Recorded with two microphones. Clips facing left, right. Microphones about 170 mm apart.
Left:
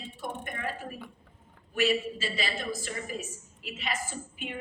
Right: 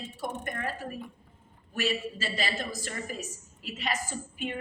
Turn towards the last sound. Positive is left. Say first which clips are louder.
# right 1 dB
turn(degrees=-45)  # may be behind; listen again after turning